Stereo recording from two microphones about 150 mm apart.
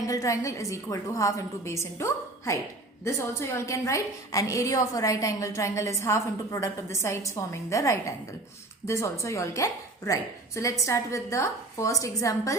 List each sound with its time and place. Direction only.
0.1 s a woman's voice: 20° left (ahead or behind)